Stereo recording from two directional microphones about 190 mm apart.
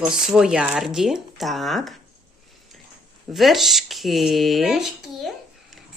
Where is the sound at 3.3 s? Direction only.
Centre (ahead or behind).